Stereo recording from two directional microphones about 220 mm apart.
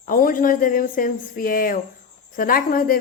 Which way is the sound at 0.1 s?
40° left (ahead or behind).